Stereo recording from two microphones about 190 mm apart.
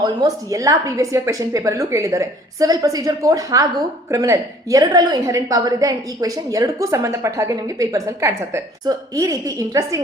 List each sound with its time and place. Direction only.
0.0 s a woman's voice: 20° right (ahead or behind)